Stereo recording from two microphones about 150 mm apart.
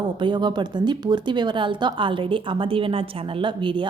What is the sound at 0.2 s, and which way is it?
Speech, 30° right (ahead or behind).